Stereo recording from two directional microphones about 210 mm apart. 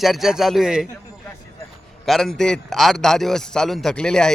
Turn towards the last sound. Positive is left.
turn(degrees=5)  # may be behind; listen again after turning